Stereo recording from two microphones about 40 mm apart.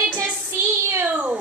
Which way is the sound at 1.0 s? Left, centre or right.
Right.